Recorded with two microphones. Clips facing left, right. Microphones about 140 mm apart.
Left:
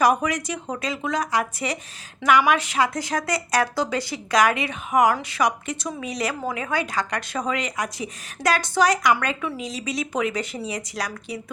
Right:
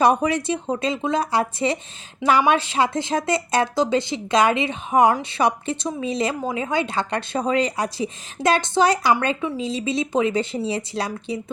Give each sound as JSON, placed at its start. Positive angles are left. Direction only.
{"t": 0.0, "sound": "speech", "side_deg": -30}